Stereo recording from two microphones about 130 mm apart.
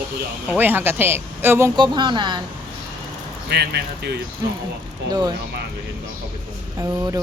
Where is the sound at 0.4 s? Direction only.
15° right (ahead or behind).